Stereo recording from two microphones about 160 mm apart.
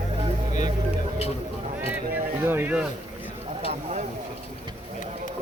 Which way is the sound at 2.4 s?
15° right (ahead or behind).